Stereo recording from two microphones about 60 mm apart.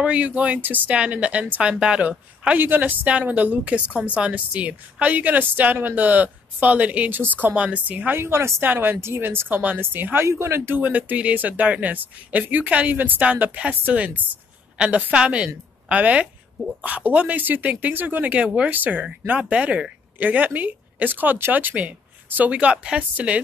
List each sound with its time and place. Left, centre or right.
0.0 s speech: right
2.0 s speech: right
8.2 s speech: right
8.6 s speech: right
10.2 s speech: right
10.8 s speech: right